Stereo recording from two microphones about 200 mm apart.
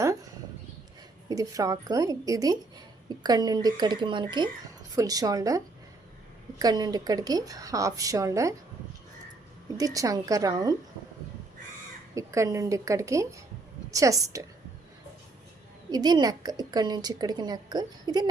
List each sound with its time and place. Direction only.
1.3 s a woman's voice: 15° right (ahead or behind)
9.7 s a woman's voice: 15° right (ahead or behind)
12.1 s a woman's voice: 15° right (ahead or behind)
15.9 s a woman's voice: 20° right (ahead or behind)